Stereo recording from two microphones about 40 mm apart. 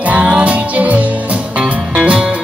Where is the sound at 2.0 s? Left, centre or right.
Right.